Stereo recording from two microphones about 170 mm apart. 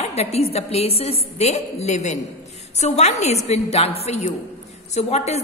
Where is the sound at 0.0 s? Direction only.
40° left (ahead or behind).